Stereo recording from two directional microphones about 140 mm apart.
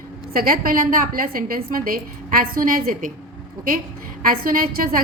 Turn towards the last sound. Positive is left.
turn(degrees=-90)